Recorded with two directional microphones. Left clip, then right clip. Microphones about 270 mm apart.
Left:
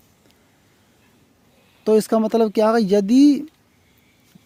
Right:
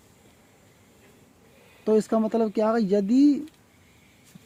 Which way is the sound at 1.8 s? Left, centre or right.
Left.